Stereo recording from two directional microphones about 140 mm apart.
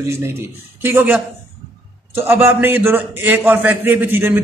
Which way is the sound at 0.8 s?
15° right (ahead or behind).